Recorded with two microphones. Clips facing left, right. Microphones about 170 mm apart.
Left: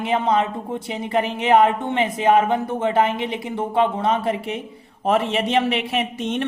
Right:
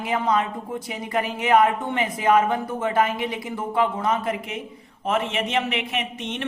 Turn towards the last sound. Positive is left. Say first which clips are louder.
# left 6 dB
turn(degrees=40)  # may be behind; listen again after turning